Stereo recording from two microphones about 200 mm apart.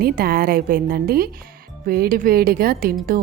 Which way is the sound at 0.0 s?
50° right (ahead or behind).